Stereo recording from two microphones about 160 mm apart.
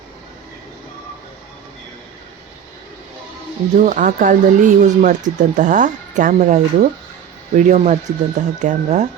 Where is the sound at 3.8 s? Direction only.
50° right (ahead or behind).